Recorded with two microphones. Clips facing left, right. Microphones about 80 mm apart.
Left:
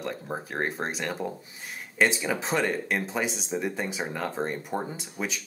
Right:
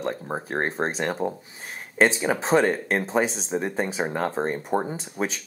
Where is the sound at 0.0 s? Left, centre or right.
Right.